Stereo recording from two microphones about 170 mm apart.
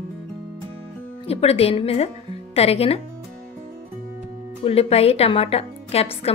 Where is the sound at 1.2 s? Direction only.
35° left (ahead or behind).